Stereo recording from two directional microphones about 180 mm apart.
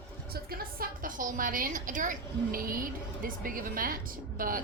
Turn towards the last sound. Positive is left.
turn(degrees=-50)  # may be behind; listen again after turning